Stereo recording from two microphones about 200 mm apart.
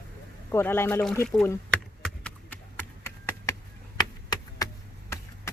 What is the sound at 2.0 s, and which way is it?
Clip-clop, 5° left (ahead or behind).